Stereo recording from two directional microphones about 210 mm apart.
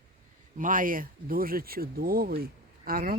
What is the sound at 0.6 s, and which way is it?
Speech, 40° right (ahead or behind).